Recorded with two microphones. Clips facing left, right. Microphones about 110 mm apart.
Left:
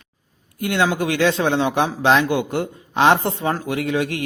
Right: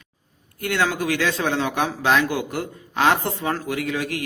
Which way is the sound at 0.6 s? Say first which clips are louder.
Left 3 dB; 20° left (ahead or behind).